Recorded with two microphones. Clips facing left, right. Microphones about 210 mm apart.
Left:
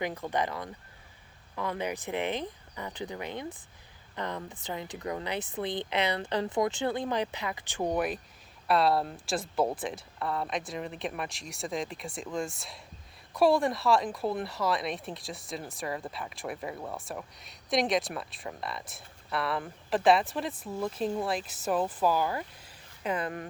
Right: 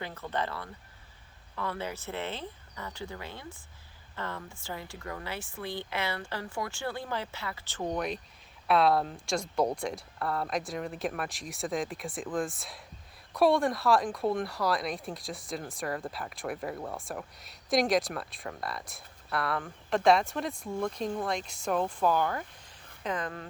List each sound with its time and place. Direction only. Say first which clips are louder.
0.0 s a woman's voice: left 3 dB; 15° left (ahead or behind)